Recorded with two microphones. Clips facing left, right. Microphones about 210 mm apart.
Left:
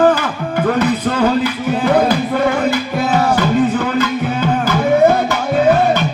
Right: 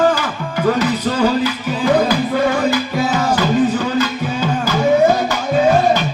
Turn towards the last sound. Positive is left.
turn(degrees=55)  # may be behind; listen again after turning